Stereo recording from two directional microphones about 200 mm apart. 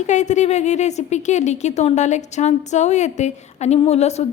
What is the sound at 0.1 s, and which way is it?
A woman's voice, 35° left (ahead or behind).